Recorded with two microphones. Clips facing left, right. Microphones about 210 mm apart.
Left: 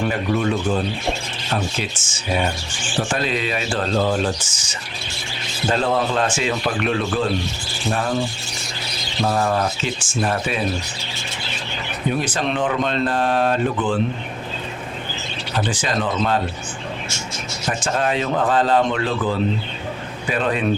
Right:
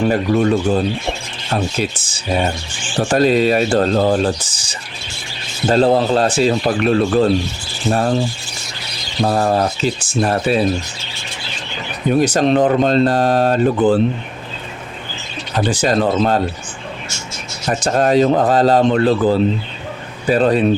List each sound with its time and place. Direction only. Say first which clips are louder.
0.1 s speech: right 6 dB; 40° right (ahead or behind)
9.2 s speech: right 4 dB; 40° right (ahead or behind)
12.2 s speech: right 9 dB; 40° right (ahead or behind)
15.5 s speech: right 7 dB; 40° right (ahead or behind)
17.7 s speech: right 7 dB; 40° right (ahead or behind)